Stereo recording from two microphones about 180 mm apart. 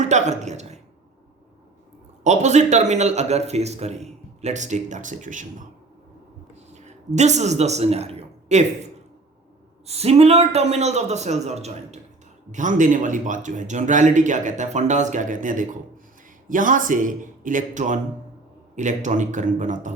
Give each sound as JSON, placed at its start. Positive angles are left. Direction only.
{"t": 0.0, "sound": "a woman's voice", "side_deg": -40}
{"t": 2.2, "sound": "speech", "side_deg": -40}
{"t": 6.7, "sound": "a man's voice", "side_deg": -40}